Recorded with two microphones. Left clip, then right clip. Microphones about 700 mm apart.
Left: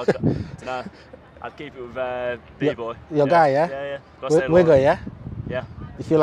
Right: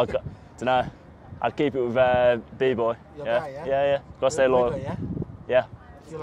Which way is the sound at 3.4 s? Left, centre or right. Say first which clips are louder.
Left 17 dB; left.